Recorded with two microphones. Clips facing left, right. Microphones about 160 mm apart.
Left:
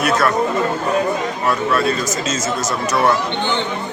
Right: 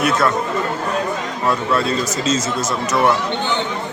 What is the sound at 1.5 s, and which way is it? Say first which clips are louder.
Speech: even; 25° right (ahead or behind).